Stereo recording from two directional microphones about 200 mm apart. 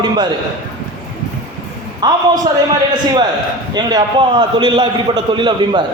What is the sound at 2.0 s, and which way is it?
Speech, 20° right (ahead or behind).